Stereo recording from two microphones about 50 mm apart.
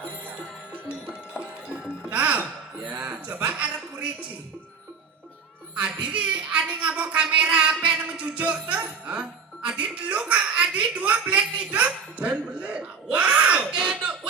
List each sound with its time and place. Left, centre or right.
1.4 s music: right
6.0 s a sound: right
7.8 s music: right